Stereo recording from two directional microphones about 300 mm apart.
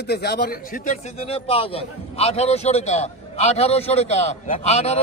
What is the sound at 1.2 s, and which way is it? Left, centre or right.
A man's voice, centre.